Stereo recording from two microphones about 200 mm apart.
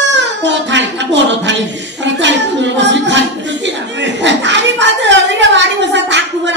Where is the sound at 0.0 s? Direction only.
60° right (ahead or behind).